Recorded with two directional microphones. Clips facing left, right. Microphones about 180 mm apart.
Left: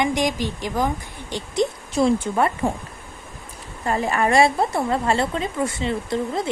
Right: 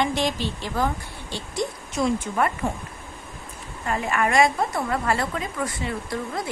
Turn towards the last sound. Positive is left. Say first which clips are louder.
# left 5 dB
turn(degrees=25)  # may be behind; listen again after turning